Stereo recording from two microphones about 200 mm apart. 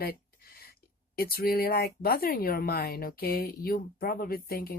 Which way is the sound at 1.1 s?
50° left (ahead or behind).